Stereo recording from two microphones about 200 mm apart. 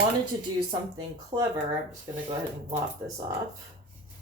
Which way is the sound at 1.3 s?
25° right (ahead or behind).